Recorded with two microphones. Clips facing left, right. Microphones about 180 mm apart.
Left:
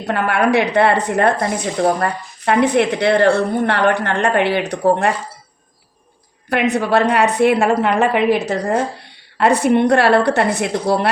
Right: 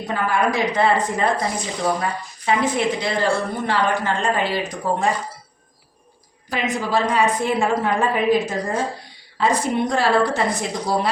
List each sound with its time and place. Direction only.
0.0 s speech: 70° left (ahead or behind)
6.5 s a woman's voice: 65° left (ahead or behind)